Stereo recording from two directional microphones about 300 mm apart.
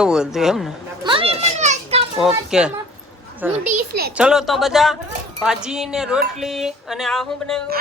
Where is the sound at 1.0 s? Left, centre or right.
Centre.